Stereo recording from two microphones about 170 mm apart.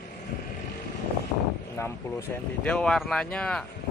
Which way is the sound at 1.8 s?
15° left (ahead or behind).